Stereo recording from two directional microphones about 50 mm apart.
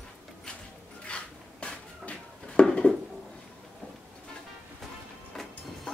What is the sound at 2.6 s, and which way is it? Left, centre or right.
Dishes, centre.